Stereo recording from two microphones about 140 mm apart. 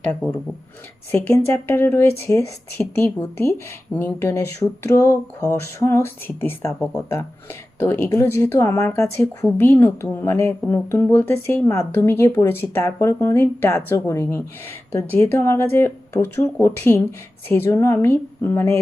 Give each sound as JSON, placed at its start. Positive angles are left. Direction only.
{"t": 1.3, "sound": "speech", "side_deg": 15}
{"t": 6.7, "sound": "speech", "side_deg": 0}
{"t": 7.8, "sound": "speech", "side_deg": 15}